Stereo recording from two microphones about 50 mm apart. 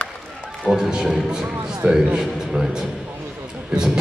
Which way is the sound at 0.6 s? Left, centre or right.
Centre.